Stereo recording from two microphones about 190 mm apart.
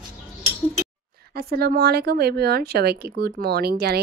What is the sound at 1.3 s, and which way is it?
Speech, 55° right (ahead or behind).